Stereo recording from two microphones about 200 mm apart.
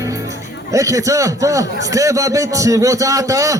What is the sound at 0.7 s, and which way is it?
A man's voice, 15° right (ahead or behind).